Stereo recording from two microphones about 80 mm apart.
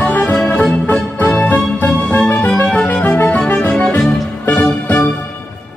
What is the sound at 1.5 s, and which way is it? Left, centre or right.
Music, left.